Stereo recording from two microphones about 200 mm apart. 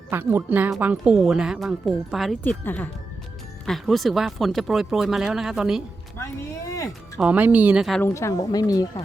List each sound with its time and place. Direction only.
0.1 s speech: 10° right (ahead or behind)
6.7 s music: 15° left (ahead or behind)
7.2 s speech: 5° right (ahead or behind)
8.0 s speech: 15° left (ahead or behind)